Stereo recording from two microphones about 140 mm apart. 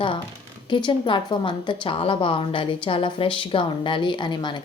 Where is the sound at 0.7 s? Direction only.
35° left (ahead or behind).